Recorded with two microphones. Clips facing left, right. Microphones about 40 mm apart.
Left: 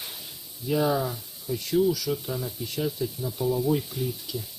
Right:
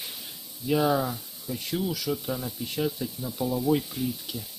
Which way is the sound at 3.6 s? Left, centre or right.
Right.